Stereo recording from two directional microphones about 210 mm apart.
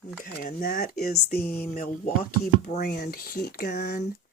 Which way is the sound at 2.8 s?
50° left (ahead or behind).